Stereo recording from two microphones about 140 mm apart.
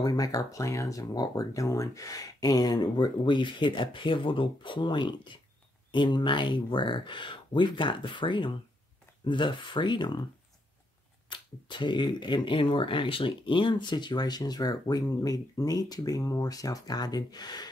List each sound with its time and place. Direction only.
0.0 s speech: 25° left (ahead or behind)
11.2 s speech: 35° left (ahead or behind)